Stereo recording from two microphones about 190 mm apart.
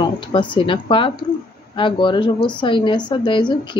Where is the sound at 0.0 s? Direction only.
25° left (ahead or behind).